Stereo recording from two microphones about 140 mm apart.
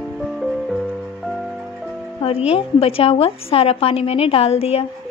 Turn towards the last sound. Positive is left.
turn(degrees=45)  # may be behind; listen again after turning